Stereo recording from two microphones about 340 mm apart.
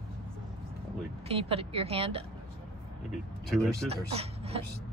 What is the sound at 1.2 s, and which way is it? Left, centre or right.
Speech, centre.